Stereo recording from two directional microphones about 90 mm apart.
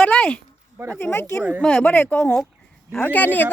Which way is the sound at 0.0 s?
10° left (ahead or behind).